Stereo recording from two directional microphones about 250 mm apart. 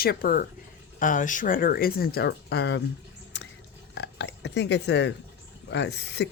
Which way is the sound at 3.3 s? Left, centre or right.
Left.